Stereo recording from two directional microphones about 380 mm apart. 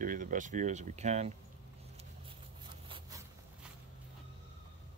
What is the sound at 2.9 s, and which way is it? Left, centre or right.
Zipper, centre.